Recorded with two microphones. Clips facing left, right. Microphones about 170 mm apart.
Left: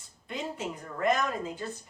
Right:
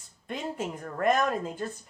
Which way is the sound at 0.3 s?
50° right (ahead or behind).